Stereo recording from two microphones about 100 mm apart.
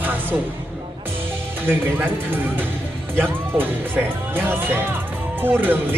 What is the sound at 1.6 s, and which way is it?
Speech, 20° right (ahead or behind).